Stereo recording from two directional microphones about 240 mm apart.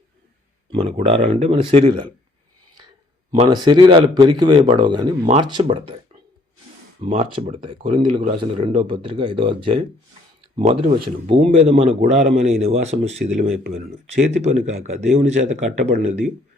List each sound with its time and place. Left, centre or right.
0.7 s speech: right
3.3 s speech: right
7.0 s speech: right